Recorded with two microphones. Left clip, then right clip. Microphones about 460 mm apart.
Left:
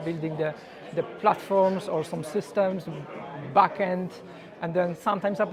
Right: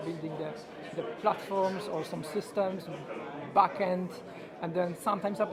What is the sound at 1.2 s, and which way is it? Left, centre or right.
Speech, left.